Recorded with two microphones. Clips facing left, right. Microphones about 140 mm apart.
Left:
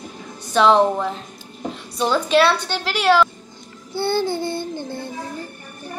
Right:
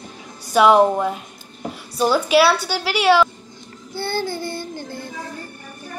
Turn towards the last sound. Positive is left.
turn(degrees=20)  # may be behind; listen again after turning